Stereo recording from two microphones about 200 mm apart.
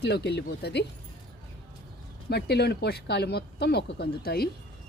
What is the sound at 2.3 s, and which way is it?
Speech, 55° left (ahead or behind).